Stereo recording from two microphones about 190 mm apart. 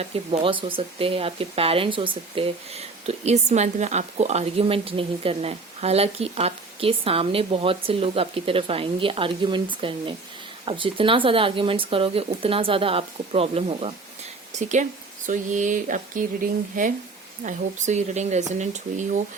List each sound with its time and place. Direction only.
0.0 s speech: 30° right (ahead or behind)